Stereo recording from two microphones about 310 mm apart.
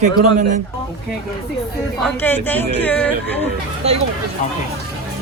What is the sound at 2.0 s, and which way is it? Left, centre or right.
Speech, centre.